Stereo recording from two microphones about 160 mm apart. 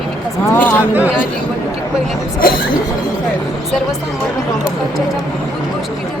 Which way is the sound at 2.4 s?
65° left (ahead or behind).